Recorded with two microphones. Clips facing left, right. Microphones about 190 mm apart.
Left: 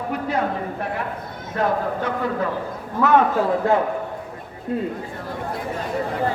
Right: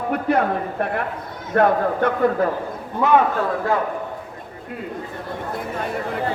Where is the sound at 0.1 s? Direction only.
55° right (ahead or behind).